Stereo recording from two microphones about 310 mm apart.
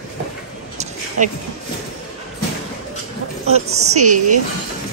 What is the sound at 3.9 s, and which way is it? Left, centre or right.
Speech, right.